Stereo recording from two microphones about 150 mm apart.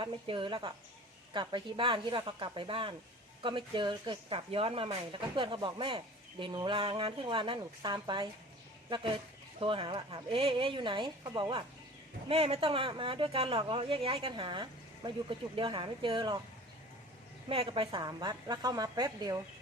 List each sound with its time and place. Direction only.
0.0 s speech: 35° right (ahead or behind)
17.5 s a woman's voice: 35° right (ahead or behind)